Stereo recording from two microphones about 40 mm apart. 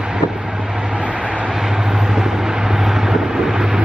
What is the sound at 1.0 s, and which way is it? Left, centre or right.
Vehicle, right.